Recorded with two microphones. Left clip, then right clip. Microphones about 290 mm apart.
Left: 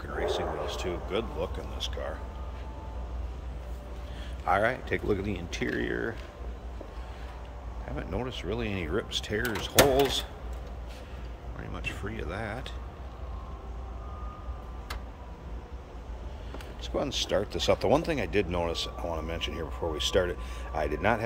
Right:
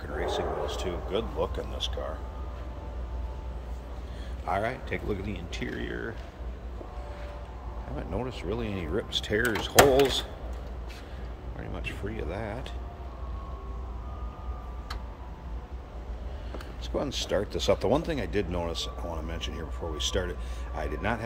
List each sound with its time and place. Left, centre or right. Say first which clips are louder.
0.3 s speech: right 4 dB; centre
4.5 s speech: left 4 dB; centre
7.9 s speech: even; centre
11.7 s speech: even; centre
16.8 s speech: left 1 dB; centre